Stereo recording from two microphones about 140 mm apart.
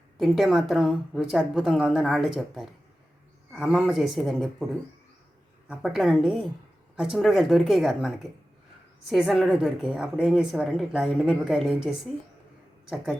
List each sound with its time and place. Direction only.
0.2 s a woman's voice: centre (ahead or behind)
5.6 s a woman's voice: 5° right (ahead or behind)